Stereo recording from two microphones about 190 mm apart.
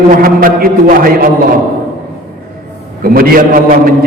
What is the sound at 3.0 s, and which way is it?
Speech, 50° right (ahead or behind).